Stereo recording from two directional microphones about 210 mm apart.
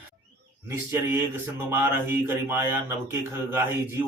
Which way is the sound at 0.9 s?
10° right (ahead or behind).